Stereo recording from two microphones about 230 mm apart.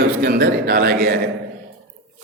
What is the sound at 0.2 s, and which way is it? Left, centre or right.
Speech, right.